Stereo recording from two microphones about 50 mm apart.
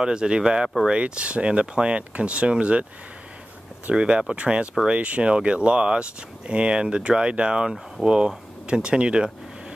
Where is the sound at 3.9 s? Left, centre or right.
Centre.